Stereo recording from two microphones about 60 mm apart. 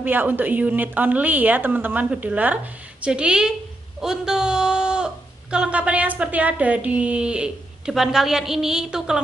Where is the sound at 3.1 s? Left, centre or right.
Centre.